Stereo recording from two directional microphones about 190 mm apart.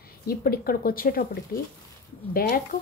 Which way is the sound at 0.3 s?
50° left (ahead or behind).